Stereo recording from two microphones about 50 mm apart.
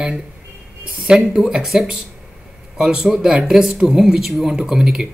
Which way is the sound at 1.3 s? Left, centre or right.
Centre.